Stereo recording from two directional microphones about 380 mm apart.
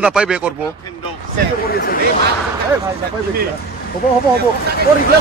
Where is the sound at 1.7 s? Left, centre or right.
Left.